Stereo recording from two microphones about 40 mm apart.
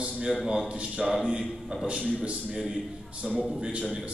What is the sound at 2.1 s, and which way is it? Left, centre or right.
A man's voice, right.